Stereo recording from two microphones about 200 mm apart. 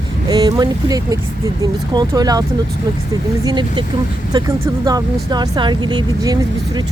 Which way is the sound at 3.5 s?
20° right (ahead or behind).